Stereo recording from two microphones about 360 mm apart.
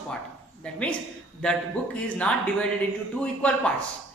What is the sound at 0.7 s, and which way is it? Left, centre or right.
Speech, centre.